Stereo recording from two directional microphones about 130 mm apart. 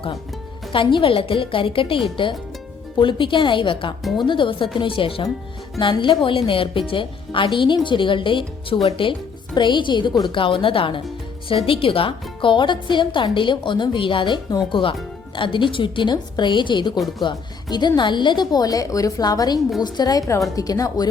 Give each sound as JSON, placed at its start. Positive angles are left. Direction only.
{"t": 0.7, "sound": "a woman's voice", "side_deg": 40}